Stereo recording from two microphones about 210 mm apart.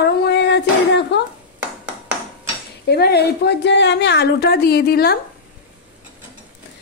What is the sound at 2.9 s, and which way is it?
A woman's voice, 50° left (ahead or behind).